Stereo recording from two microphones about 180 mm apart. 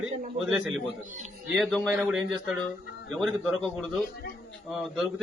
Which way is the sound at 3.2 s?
Centre (ahead or behind).